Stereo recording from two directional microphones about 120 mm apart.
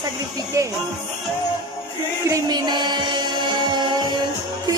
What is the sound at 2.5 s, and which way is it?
Music, 40° right (ahead or behind).